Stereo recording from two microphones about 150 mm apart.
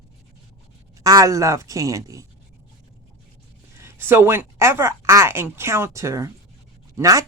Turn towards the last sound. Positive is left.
turn(degrees=-20)  # may be behind; listen again after turning